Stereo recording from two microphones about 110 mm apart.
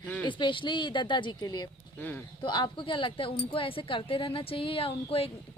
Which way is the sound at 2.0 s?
15° left (ahead or behind).